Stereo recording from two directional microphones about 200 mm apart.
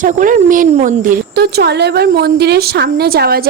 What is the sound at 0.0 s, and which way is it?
A woman's voice, 40° right (ahead or behind).